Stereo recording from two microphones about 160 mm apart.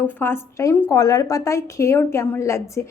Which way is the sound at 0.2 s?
15° left (ahead or behind).